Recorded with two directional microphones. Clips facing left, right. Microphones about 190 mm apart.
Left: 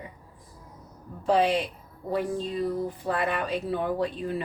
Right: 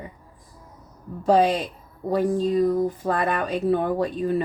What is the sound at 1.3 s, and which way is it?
A woman's voice, 40° right (ahead or behind).